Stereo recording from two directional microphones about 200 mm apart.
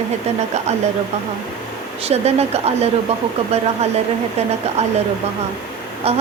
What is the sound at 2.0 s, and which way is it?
Speech, 30° right (ahead or behind).